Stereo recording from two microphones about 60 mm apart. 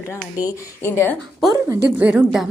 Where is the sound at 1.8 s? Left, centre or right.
Right.